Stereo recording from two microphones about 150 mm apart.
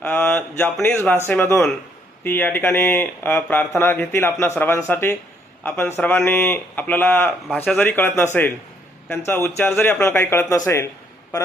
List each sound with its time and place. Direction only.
0.0 s speech: 10° left (ahead or behind)